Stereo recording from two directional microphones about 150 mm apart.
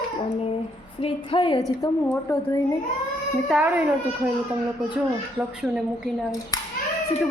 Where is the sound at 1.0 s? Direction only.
35° left (ahead or behind).